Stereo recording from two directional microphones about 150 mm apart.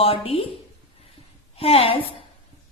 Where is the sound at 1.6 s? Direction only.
40° left (ahead or behind).